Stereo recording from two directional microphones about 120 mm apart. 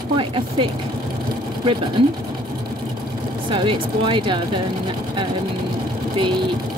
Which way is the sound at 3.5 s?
45° right (ahead or behind).